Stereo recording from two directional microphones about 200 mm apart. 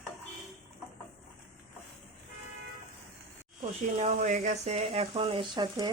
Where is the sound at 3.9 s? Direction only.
35° right (ahead or behind); by 5.9 s 20° right (ahead or behind).